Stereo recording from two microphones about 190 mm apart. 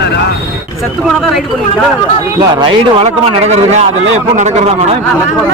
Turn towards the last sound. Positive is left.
turn(degrees=-35)  # may be behind; listen again after turning